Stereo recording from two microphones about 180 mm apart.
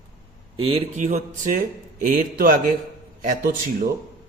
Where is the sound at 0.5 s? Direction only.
30° right (ahead or behind); by 2.6 s 50° right (ahead or behind).